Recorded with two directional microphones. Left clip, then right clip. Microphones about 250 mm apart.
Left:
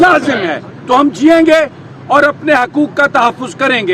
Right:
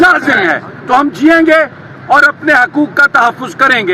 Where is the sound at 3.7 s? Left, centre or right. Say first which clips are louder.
Left 1 dB; centre.